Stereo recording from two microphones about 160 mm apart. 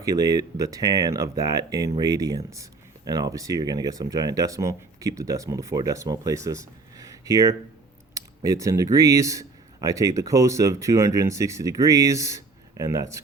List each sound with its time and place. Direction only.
0.0 s speech: 25° right (ahead or behind)